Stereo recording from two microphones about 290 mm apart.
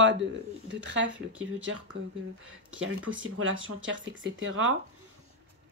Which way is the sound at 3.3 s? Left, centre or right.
Right.